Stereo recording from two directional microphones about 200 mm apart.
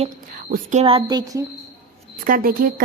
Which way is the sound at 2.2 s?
45° right (ahead or behind).